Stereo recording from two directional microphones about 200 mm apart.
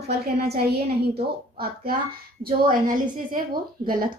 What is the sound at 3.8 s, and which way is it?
Speech, 45° right (ahead or behind).